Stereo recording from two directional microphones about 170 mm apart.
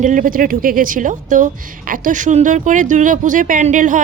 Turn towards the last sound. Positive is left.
turn(degrees=-50)  # may be behind; listen again after turning